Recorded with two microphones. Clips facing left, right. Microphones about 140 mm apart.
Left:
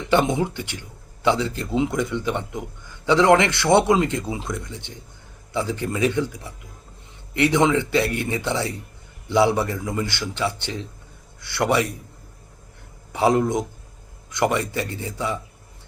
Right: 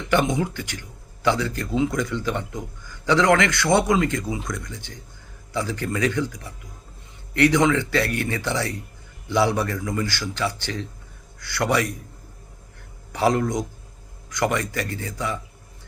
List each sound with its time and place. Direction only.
0.1 s speech: 25° left (ahead or behind)
13.1 s speech: 20° left (ahead or behind)